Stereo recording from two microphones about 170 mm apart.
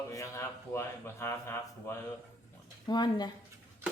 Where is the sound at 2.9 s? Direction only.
25° left (ahead or behind).